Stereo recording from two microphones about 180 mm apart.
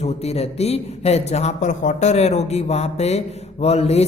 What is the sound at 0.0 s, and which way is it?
Speech, 35° left (ahead or behind).